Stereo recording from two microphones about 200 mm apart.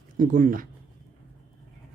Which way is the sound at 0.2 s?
40° right (ahead or behind).